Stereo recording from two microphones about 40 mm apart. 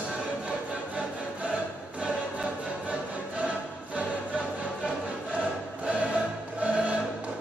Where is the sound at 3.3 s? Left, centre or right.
Right.